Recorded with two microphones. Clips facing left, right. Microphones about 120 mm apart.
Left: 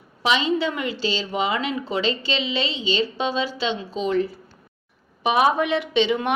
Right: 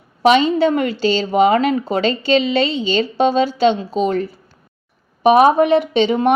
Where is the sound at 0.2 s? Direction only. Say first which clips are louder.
Right 9 dB; 45° right (ahead or behind).